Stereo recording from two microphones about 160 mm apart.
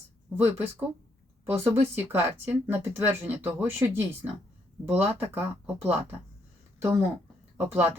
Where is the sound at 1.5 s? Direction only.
15° right (ahead or behind).